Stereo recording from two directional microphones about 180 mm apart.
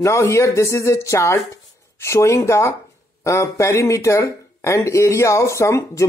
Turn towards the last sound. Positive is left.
turn(degrees=15)  # may be behind; listen again after turning